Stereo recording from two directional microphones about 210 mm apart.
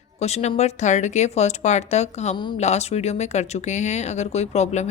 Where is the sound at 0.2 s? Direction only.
30° left (ahead or behind).